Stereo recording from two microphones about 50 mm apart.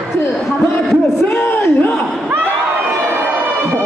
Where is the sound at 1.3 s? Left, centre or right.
Left.